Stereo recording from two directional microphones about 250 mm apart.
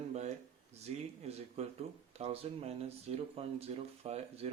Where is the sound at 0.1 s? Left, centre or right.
Right.